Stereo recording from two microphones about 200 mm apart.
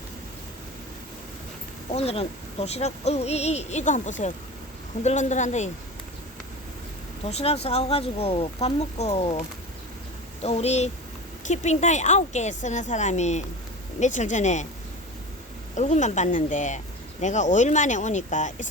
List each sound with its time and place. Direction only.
1.9 s speech: 30° left (ahead or behind)
7.3 s speech: 30° left (ahead or behind)
10.4 s speech: 30° left (ahead or behind)
15.7 s speech: 35° left (ahead or behind)